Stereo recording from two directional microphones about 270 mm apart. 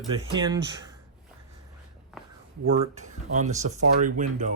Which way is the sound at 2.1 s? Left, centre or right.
Centre.